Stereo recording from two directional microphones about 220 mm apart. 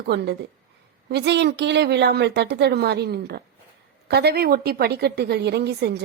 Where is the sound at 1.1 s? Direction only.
50° right (ahead or behind).